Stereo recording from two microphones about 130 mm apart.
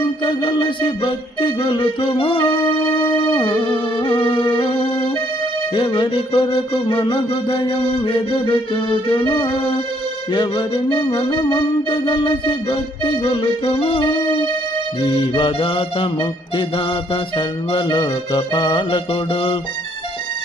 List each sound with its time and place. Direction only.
0.2 s music: 35° left (ahead or behind)
15.1 s music: 40° left (ahead or behind)
17.3 s music: 35° left (ahead or behind)
18.9 s music: 40° left (ahead or behind)